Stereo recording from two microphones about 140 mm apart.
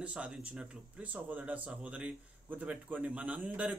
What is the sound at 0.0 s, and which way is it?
Speech, 5° right (ahead or behind).